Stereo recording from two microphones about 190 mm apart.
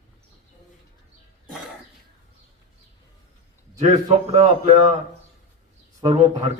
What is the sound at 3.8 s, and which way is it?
Speech, 35° right (ahead or behind).